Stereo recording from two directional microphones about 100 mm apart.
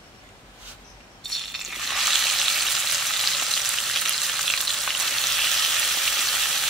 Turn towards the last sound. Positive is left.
turn(degrees=0)  # may be behind; listen again after turning